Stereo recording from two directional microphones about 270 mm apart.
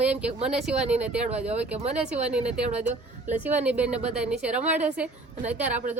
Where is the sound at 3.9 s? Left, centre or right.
Right.